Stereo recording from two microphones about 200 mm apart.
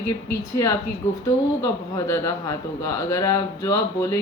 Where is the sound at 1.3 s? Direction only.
15° left (ahead or behind).